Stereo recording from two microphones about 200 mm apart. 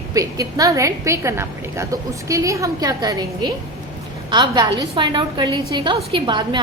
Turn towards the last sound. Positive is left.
turn(degrees=-25)  # may be behind; listen again after turning